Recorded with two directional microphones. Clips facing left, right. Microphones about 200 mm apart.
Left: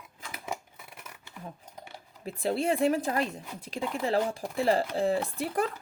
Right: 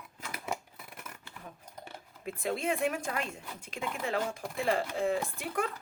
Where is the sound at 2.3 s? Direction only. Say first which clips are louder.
Left 4 dB; 35° left (ahead or behind).